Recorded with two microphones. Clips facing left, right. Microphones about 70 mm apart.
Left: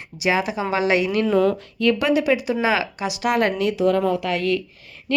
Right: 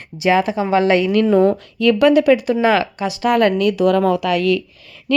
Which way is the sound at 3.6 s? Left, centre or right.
Right.